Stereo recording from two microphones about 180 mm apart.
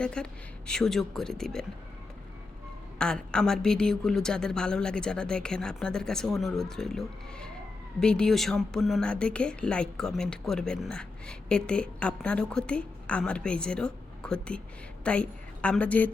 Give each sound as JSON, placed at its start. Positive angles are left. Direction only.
{"t": 0.0, "sound": "a woman's voice", "side_deg": 5}
{"t": 3.0, "sound": "a woman's voice", "side_deg": 5}